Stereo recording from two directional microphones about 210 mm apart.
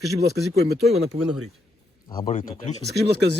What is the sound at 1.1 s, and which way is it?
Speech, 30° right (ahead or behind).